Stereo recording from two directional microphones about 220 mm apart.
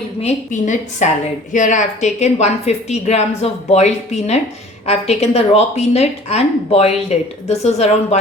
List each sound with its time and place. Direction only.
0.2 s a woman's voice: 30° left (ahead or behind)